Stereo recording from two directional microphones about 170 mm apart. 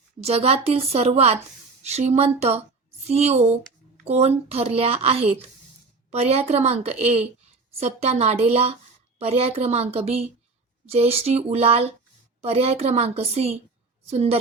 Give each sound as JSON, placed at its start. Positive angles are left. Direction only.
{"t": 0.2, "sound": "a woman's voice", "side_deg": -35}